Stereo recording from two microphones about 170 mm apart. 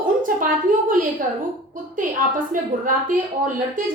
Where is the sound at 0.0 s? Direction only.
55° right (ahead or behind).